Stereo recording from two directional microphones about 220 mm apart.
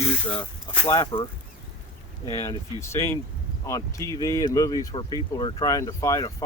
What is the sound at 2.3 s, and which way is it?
Speech, 15° left (ahead or behind).